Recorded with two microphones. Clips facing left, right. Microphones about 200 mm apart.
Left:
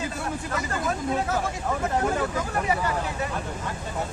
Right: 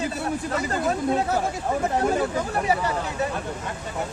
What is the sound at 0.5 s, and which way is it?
Speech, 30° right (ahead or behind).